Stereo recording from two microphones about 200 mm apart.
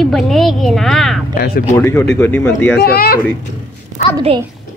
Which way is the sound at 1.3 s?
50° left (ahead or behind).